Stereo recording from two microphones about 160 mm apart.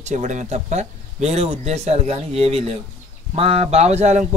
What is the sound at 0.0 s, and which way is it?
Speech, 50° right (ahead or behind).